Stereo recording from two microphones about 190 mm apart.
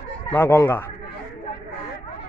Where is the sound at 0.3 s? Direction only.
10° left (ahead or behind).